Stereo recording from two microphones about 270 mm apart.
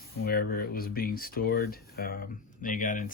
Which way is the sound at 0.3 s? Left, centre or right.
Left.